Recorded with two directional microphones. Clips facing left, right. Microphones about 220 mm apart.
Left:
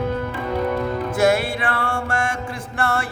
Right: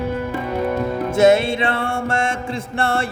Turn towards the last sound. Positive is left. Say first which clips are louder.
# right 3 dB
turn(degrees=-25)  # may be behind; listen again after turning